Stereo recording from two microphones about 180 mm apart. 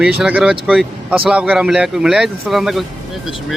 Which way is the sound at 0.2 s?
5° right (ahead or behind).